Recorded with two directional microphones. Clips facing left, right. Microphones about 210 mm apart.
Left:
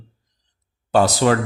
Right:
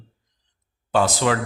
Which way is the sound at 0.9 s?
40° left (ahead or behind).